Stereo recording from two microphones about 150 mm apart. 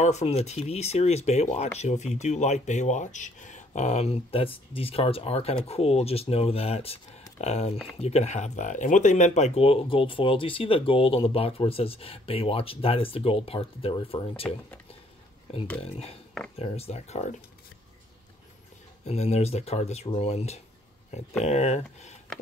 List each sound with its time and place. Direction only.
0.0 s speech: 45° left (ahead or behind)
15.8 s speech: 40° left (ahead or behind)
19.0 s speech: 45° left (ahead or behind)